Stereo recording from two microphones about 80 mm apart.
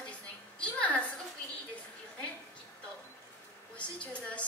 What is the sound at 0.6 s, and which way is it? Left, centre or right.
Speech, centre.